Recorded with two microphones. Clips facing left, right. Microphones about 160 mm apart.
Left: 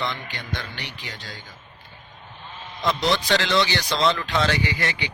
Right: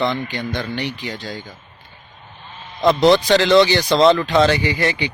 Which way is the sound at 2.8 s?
40° right (ahead or behind).